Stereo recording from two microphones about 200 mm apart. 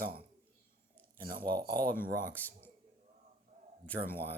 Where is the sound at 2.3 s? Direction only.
10° left (ahead or behind).